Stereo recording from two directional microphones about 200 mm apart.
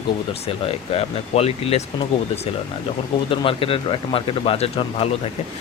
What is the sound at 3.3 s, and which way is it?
Speech, 25° left (ahead or behind).